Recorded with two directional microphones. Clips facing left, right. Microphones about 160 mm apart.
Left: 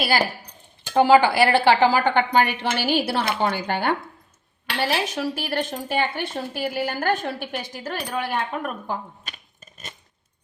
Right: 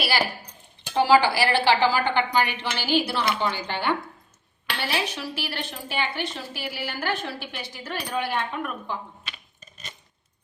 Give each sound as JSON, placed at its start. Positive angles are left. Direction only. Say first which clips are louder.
{"t": 0.0, "sound": "a woman's voice", "louder": "left 3 dB", "side_deg": 45}